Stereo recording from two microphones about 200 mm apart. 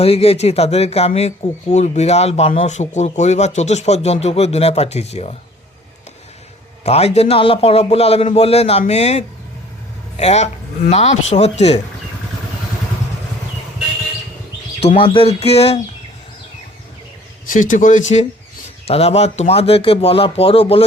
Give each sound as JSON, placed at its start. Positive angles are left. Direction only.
{"t": 0.0, "sound": "a man's voice", "side_deg": 30}
{"t": 6.8, "sound": "a man's voice", "side_deg": 30}
{"t": 14.8, "sound": "a man's voice", "side_deg": 30}
{"t": 17.5, "sound": "a man's voice", "side_deg": 40}